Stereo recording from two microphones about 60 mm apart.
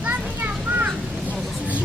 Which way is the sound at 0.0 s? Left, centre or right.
Right.